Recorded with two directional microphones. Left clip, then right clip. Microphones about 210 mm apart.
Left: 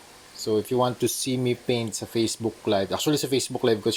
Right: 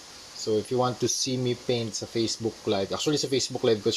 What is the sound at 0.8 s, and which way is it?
Speech, 15° left (ahead or behind).